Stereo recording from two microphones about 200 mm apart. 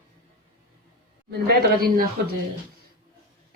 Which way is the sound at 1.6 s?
50° right (ahead or behind).